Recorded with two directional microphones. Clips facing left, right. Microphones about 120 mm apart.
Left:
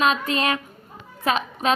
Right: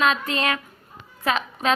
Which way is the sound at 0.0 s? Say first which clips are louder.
Left 1 dB; 20° left (ahead or behind).